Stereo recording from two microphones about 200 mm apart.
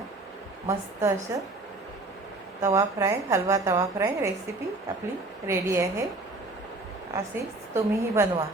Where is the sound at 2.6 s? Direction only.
15° right (ahead or behind).